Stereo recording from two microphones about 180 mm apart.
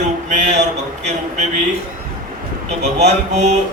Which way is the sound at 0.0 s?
40° right (ahead or behind).